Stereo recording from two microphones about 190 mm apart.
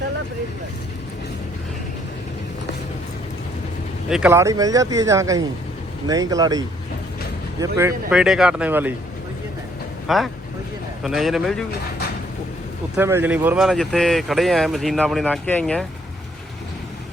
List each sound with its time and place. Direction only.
4.1 s speech: 10° right (ahead or behind)
8.1 s speech: 5° right (ahead or behind)
10.1 s speech: centre (ahead or behind)
13.0 s speech: 10° right (ahead or behind); by 15.9 s 5° left (ahead or behind)